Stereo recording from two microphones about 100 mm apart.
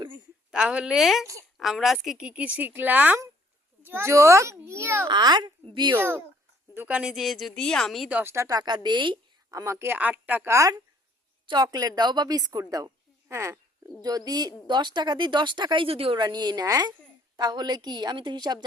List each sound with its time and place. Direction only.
0.5 s a woman's voice: 10° right (ahead or behind); by 5.0 s 25° right (ahead or behind)
5.0 s speech: 45° right (ahead or behind)
6.0 s a child's voice: 25° right (ahead or behind); by 8.1 s centre (ahead or behind)
8.1 s speech: 25° right (ahead or behind); by 9.1 s 50° right (ahead or behind)
9.5 s a child's voice: 30° right (ahead or behind); by 10.5 s 15° right (ahead or behind)
10.5 s speech: 35° right (ahead or behind)
11.4 s speech: 50° right (ahead or behind); by 13.6 s 25° right (ahead or behind)
14.0 s speech: 40° right (ahead or behind); by 16.2 s 65° right (ahead or behind)
16.2 s speech: 45° right (ahead or behind)